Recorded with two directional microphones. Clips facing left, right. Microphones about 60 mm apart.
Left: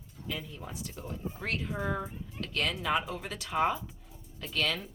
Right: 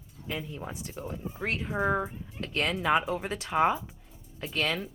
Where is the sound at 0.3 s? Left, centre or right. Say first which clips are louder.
Right 3 dB; right.